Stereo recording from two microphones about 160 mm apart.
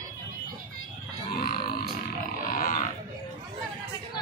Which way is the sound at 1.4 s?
70° left (ahead or behind).